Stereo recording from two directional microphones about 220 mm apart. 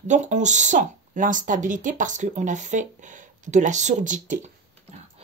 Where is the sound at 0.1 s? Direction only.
35° right (ahead or behind).